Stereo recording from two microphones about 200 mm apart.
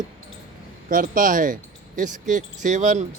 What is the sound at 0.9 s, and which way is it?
Speech, 45° right (ahead or behind).